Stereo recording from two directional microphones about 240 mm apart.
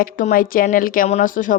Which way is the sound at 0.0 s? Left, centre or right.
Left.